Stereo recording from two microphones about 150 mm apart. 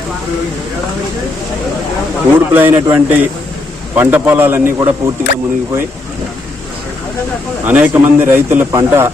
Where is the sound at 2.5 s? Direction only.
15° right (ahead or behind).